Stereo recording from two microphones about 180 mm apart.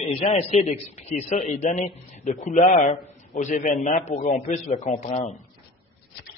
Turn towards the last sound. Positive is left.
turn(degrees=35)  # may be behind; listen again after turning